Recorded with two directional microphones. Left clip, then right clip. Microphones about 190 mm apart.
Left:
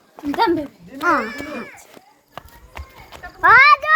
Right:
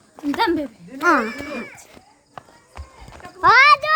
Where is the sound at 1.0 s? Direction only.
30° right (ahead or behind).